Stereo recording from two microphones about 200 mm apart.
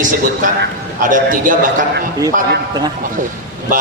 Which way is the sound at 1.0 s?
40° right (ahead or behind).